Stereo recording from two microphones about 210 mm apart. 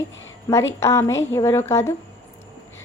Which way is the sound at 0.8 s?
15° left (ahead or behind).